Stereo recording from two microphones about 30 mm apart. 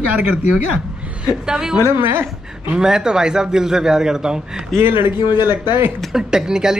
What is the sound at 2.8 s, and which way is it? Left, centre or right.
Speech, right.